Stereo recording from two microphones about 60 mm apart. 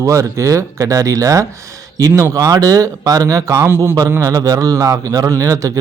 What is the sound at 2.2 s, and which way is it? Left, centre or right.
Speech, right.